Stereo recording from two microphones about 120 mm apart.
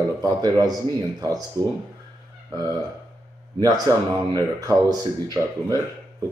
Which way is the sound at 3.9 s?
30° right (ahead or behind).